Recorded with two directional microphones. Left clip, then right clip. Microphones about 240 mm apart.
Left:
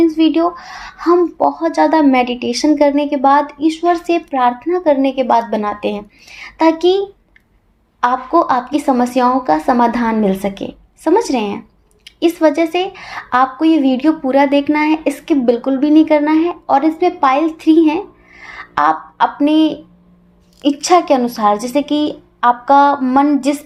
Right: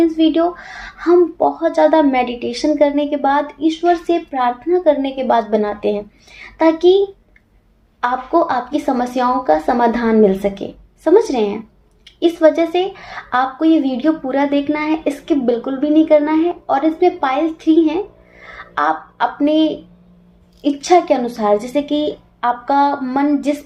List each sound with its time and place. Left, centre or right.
0.0 s speech: left
8.0 s speech: left